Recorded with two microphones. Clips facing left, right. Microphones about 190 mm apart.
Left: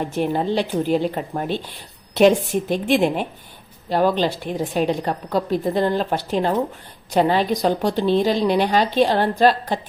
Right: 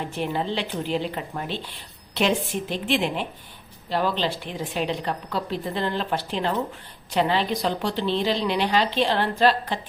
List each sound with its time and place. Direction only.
0.0 s a woman's voice: 45° left (ahead or behind)